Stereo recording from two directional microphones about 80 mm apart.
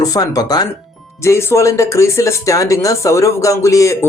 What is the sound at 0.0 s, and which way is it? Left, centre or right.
Speech, left.